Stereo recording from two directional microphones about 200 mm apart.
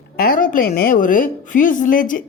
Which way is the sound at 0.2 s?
45° left (ahead or behind).